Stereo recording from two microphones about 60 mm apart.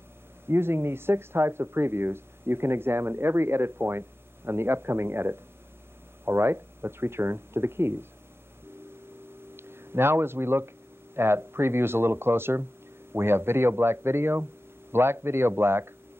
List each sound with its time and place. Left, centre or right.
0.5 s speech: right
9.6 s speech: right